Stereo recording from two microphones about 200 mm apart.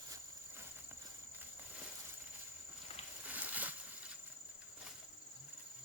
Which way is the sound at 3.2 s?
10° right (ahead or behind).